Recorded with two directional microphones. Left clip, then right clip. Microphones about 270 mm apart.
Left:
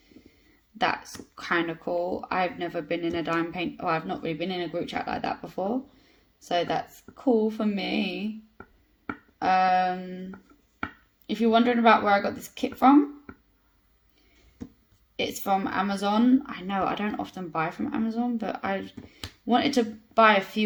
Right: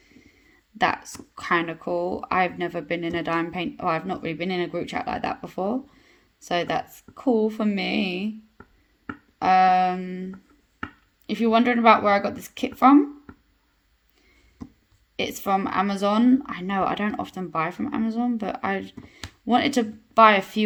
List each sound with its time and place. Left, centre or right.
1.5 s speech: right
11.3 s speech: right
15.1 s speech: right